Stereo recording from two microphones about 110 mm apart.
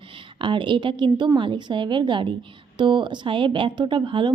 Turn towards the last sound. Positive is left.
turn(degrees=-50)  # may be behind; listen again after turning